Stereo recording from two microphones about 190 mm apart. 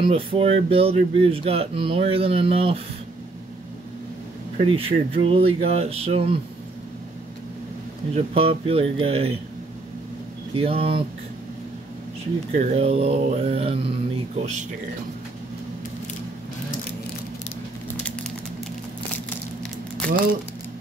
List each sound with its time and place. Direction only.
0.0 s speech: 30° right (ahead or behind)
4.6 s speech: 30° right (ahead or behind)
8.1 s speech: 30° right (ahead or behind)
10.5 s speech: 30° right (ahead or behind)
12.6 s speech: 30° right (ahead or behind)
20.0 s crumpling: 5° left (ahead or behind)